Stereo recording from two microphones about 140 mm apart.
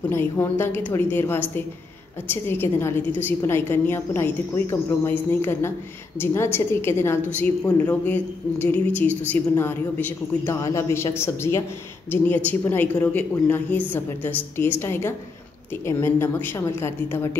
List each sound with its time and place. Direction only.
0.1 s a woman's voice: 15° left (ahead or behind)